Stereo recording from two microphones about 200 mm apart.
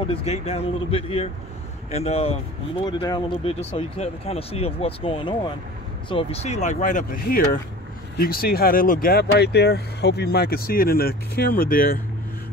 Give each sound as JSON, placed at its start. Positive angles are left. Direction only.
{"t": 0.0, "sound": "speech", "side_deg": 30}
{"t": 2.8, "sound": "speech", "side_deg": 20}